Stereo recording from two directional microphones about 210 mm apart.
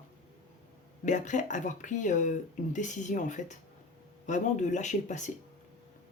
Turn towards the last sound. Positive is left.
turn(degrees=35)  # may be behind; listen again after turning